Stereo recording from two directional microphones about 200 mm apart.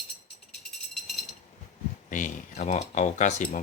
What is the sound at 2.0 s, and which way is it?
Speech, 40° left (ahead or behind).